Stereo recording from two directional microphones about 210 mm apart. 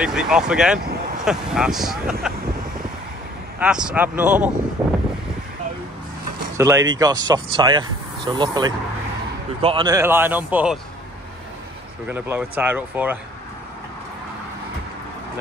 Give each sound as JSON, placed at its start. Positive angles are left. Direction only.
{"t": 0.0, "sound": "speech", "side_deg": -5}
{"t": 3.5, "sound": "speech", "side_deg": -5}
{"t": 4.8, "sound": "wind", "side_deg": -5}
{"t": 6.5, "sound": "a man's voice", "side_deg": -15}
{"t": 12.1, "sound": "a man's voice", "side_deg": -10}